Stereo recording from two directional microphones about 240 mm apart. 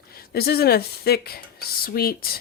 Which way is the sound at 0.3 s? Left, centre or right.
Left.